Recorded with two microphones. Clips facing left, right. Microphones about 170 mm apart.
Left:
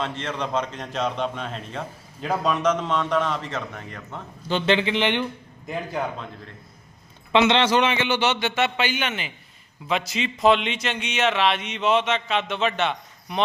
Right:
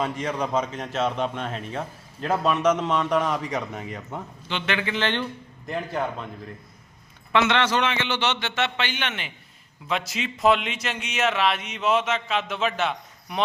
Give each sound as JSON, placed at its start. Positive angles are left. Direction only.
{"t": 0.0, "sound": "a man's voice", "side_deg": -10}
{"t": 4.4, "sound": "speech", "side_deg": 35}
{"t": 5.6, "sound": "a man's voice", "side_deg": 0}
{"t": 7.3, "sound": "a man's voice", "side_deg": 20}